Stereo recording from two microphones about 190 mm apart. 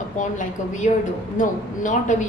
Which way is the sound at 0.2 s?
40° left (ahead or behind).